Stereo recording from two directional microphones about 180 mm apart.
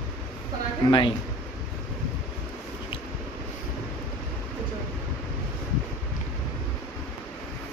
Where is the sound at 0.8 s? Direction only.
30° left (ahead or behind).